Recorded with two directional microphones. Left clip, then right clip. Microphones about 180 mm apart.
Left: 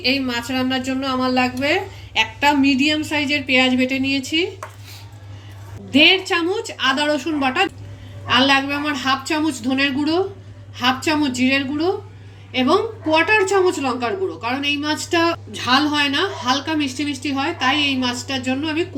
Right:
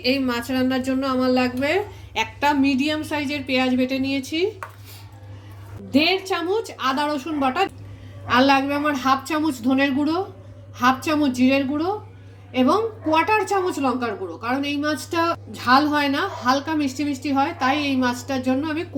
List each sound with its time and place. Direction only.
0.0 s a woman's voice: 55° right (ahead or behind)
5.9 s a woman's voice: 40° right (ahead or behind)